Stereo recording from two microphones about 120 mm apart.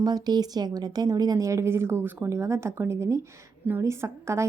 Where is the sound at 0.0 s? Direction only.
35° right (ahead or behind).